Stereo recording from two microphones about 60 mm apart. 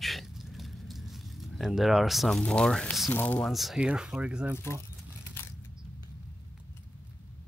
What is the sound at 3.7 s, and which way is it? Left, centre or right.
Speech, centre.